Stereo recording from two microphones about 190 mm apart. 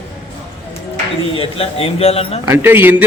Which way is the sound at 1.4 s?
30° left (ahead or behind).